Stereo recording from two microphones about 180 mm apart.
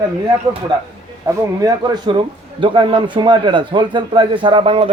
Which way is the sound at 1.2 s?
20° right (ahead or behind).